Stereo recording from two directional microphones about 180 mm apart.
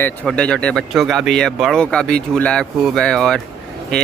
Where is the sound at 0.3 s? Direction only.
5° left (ahead or behind).